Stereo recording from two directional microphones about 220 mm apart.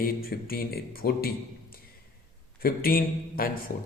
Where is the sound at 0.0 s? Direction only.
40° left (ahead or behind).